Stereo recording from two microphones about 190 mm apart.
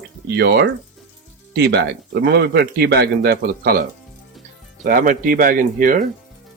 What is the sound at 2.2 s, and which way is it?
A man's voice, 60° right (ahead or behind).